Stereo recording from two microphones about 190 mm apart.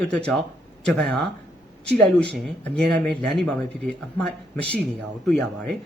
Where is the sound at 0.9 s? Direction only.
5° left (ahead or behind).